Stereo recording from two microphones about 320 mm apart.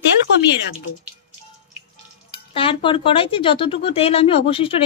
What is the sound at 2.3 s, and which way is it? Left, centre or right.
Speech, centre.